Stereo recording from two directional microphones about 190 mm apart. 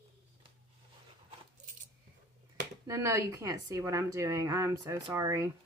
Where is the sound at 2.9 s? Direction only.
15° right (ahead or behind).